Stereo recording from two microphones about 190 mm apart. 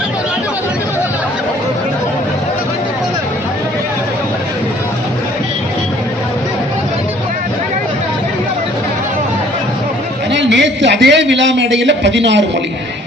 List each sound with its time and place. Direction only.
10.3 s a man's voice: 65° right (ahead or behind)